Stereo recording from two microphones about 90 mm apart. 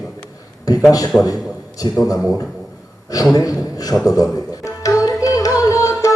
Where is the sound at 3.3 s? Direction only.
40° left (ahead or behind).